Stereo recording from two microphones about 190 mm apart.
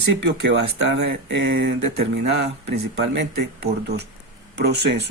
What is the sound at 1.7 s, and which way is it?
Speech, 60° right (ahead or behind).